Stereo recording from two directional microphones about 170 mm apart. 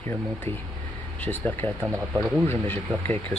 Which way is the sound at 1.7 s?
10° right (ahead or behind).